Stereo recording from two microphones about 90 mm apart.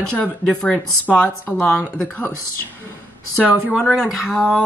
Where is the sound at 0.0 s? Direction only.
10° left (ahead or behind).